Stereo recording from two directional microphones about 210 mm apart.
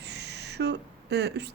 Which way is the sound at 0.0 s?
55° right (ahead or behind).